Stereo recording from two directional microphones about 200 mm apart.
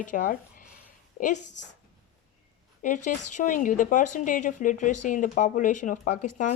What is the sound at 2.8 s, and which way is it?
Speech, 40° left (ahead or behind).